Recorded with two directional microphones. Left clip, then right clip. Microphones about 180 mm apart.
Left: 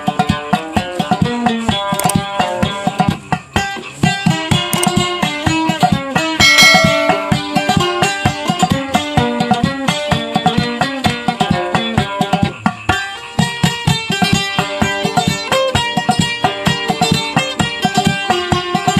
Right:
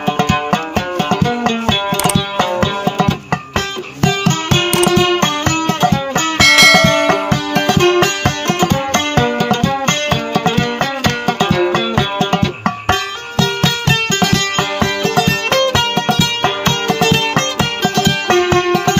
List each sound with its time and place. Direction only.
0.0 s music: 15° right (ahead or behind)
6.3 s music: centre (ahead or behind)
7.2 s music: 20° right (ahead or behind)
14.2 s music: 20° right (ahead or behind)